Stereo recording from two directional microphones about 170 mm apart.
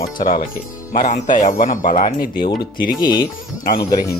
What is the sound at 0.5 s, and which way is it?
Speech, 45° left (ahead or behind).